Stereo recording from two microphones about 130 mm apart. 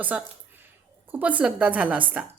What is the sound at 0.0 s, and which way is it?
A woman's voice, 10° right (ahead or behind).